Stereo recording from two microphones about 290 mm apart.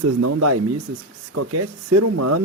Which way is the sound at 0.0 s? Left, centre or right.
Right.